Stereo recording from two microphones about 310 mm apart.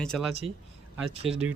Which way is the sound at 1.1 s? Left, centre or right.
Centre.